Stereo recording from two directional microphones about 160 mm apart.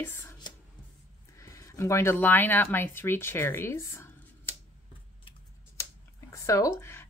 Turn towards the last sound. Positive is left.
turn(degrees=15)  # may be behind; listen again after turning